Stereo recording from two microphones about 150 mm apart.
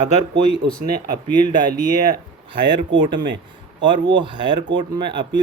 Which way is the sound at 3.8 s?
30° right (ahead or behind).